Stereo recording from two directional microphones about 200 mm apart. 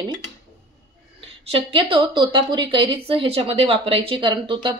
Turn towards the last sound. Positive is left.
turn(degrees=-25)  # may be behind; listen again after turning